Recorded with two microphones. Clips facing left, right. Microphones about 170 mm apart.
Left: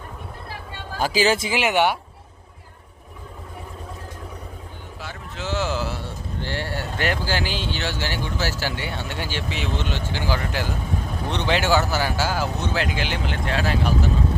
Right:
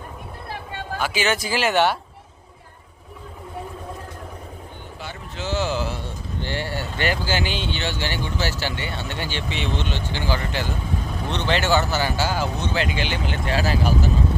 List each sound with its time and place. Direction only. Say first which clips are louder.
0.9 s speech: left 4 dB; 35° left (ahead or behind)
1.5 s speech: even; 15° left (ahead or behind)
5.0 s a sound: right 1 dB; centre (ahead or behind)
6.4 s speech: right 1 dB; centre (ahead or behind)